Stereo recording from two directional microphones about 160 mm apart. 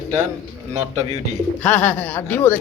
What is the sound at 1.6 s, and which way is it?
Speech, 10° left (ahead or behind).